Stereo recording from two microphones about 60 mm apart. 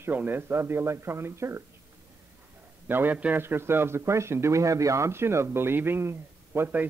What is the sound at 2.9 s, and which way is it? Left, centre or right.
Speech, right.